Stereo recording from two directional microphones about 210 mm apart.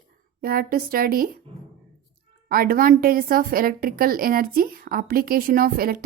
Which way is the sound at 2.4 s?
45° right (ahead or behind).